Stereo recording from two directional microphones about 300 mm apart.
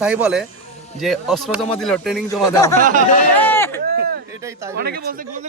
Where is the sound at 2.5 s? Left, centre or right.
Centre.